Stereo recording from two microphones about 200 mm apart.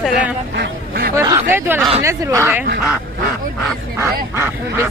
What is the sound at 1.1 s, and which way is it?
Speech, 15° right (ahead or behind).